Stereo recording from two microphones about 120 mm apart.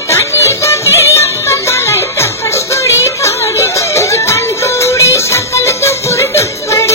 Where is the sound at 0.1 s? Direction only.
25° left (ahead or behind).